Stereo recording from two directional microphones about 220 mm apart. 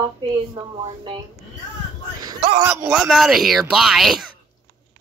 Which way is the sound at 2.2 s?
20° right (ahead or behind).